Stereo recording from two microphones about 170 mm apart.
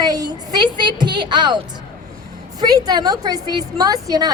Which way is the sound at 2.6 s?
20° right (ahead or behind).